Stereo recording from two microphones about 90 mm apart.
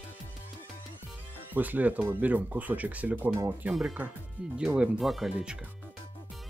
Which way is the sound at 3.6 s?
10° right (ahead or behind).